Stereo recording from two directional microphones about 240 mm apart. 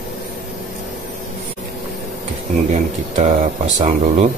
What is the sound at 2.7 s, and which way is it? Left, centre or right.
Speech, right.